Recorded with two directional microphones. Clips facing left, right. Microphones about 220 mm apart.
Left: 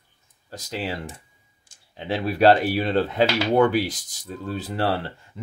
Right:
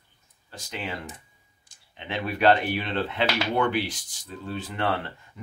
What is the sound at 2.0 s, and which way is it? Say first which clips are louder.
Speech: left 6 dB; 35° left (ahead or behind).